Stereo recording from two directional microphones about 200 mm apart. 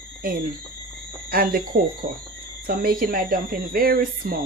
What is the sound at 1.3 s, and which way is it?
Speech, 45° right (ahead or behind).